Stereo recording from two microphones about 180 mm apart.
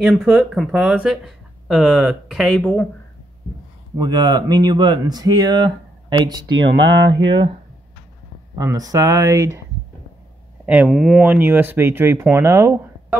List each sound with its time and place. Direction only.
0.2 s speech: centre (ahead or behind)
4.0 s speech: 20° right (ahead or behind)
6.6 s speech: 80° right
8.5 s speech: 20° right (ahead or behind)
10.6 s speech: 5° right (ahead or behind)